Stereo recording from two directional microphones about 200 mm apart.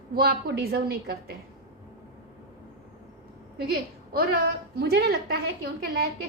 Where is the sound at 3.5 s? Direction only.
50° right (ahead or behind).